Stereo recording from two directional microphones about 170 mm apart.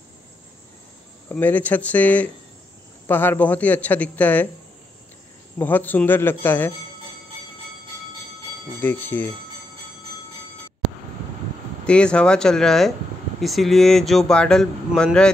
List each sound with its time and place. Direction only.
1.3 s speech: 10° left (ahead or behind)
5.6 s speech: 10° left (ahead or behind)
8.8 s speech: 10° left (ahead or behind)
11.8 s speech: 5° left (ahead or behind)